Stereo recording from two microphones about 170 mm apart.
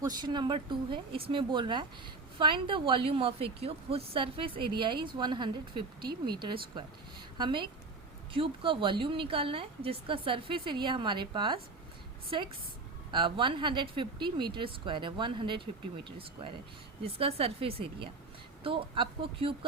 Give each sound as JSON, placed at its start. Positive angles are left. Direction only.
{"t": 0.0, "sound": "a woman's voice", "side_deg": -25}